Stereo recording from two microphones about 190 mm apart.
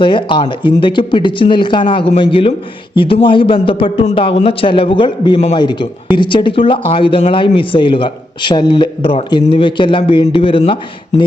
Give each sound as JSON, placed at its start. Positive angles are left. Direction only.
{"t": 0.0, "sound": "speech", "side_deg": 25}